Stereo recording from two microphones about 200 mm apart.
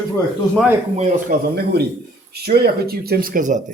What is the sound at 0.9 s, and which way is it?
Speech, 40° right (ahead or behind).